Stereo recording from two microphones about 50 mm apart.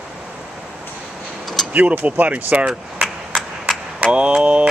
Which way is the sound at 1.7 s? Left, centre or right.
Right.